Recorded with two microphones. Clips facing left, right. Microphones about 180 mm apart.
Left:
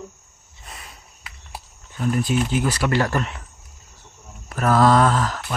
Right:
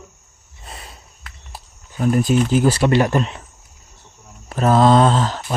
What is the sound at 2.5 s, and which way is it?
Speech, 30° right (ahead or behind).